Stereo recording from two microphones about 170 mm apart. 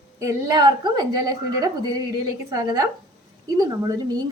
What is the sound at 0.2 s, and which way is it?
A woman's voice, 20° right (ahead or behind).